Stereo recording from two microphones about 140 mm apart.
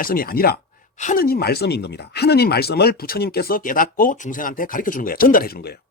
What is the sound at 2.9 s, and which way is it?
Speech, 90° left.